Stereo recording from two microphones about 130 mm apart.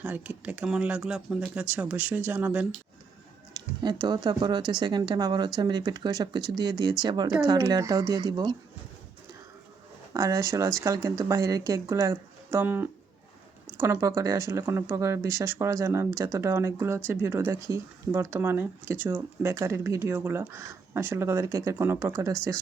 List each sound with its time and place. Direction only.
0.0 s speech: 10° right (ahead or behind)
3.5 s speech: 35° right (ahead or behind)
10.1 s speech: 25° right (ahead or behind)